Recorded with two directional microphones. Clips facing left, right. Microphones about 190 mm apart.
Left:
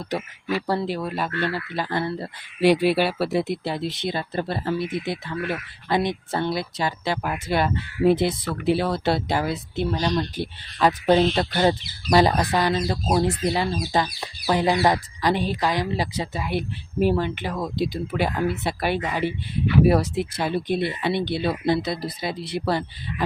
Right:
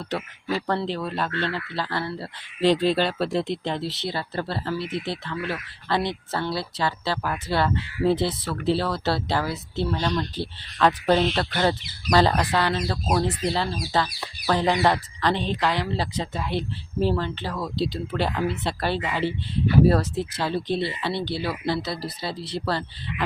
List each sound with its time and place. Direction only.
0.7 s speech: 10° left (ahead or behind)